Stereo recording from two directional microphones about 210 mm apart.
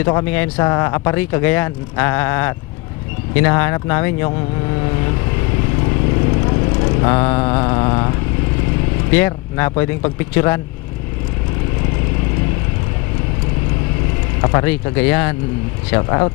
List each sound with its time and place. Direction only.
0.0 s speech: 15° left (ahead or behind)
6.5 s vehicle: 25° left (ahead or behind)
9.0 s speech: 10° left (ahead or behind)
14.4 s speech: 15° left (ahead or behind)